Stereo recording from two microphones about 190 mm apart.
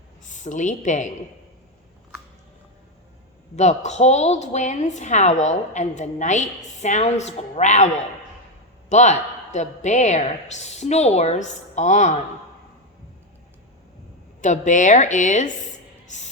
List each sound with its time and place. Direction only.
0.3 s a woman's voice: 40° left (ahead or behind)
3.5 s speech: 35° left (ahead or behind)
8.9 s speech: 40° left (ahead or behind)
14.4 s speech: 40° left (ahead or behind)